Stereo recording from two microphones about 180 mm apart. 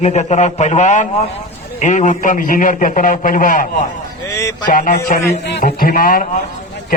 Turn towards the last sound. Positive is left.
turn(degrees=55)  # may be behind; listen again after turning